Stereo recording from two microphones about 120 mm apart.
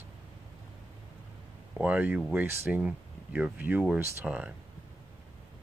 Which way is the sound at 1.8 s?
10° right (ahead or behind).